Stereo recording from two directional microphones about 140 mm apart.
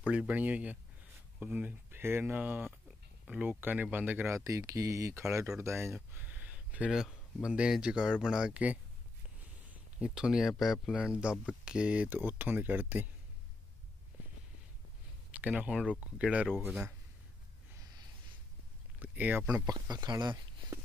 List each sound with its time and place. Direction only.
0.0 s speech: 10° right (ahead or behind)
5.9 s a sound: 10° right (ahead or behind)
7.4 s speech: 5° right (ahead or behind)
15.4 s speech: 10° right (ahead or behind)
17.7 s a sound: 30° right (ahead or behind)
18.9 s speech: 15° right (ahead or behind)
19.6 s speech: 30° right (ahead or behind)